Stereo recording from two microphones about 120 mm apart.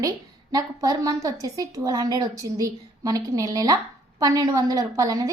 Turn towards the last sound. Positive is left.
turn(degrees=-30)  # may be behind; listen again after turning